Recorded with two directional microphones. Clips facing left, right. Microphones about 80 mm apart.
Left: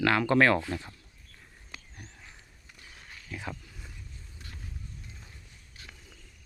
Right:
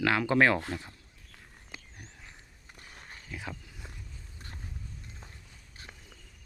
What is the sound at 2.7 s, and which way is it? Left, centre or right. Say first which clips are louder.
Horse: right 1 dB; right.